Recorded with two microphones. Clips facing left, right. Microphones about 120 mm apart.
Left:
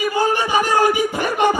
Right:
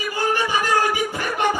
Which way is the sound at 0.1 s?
20° left (ahead or behind).